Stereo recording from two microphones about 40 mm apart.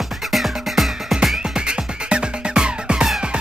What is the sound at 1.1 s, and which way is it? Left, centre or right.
Music, centre.